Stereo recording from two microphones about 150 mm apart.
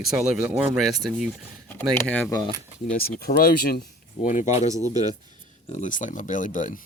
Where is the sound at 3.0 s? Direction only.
90° left.